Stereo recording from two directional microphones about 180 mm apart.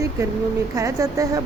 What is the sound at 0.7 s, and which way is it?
Speech, 15° right (ahead or behind).